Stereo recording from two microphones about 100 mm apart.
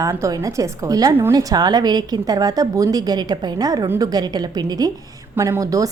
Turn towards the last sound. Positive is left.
turn(degrees=-35)  # may be behind; listen again after turning